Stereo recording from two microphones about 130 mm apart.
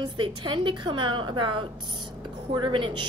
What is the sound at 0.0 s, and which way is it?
A woman's voice, 40° right (ahead or behind).